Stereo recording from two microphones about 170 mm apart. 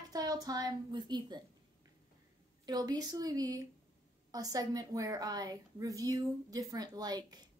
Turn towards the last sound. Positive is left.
turn(degrees=-25)  # may be behind; listen again after turning